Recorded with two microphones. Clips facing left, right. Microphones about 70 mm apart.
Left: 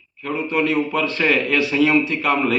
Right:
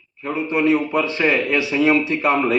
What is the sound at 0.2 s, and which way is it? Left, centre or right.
A man's voice, right.